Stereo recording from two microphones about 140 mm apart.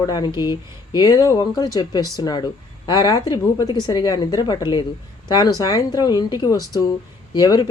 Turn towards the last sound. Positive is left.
turn(degrees=30)  # may be behind; listen again after turning